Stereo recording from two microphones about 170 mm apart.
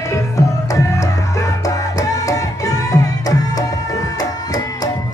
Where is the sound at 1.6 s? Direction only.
20° left (ahead or behind).